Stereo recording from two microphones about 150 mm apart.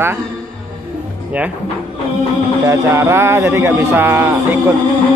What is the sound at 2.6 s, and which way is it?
Speech, 20° right (ahead or behind).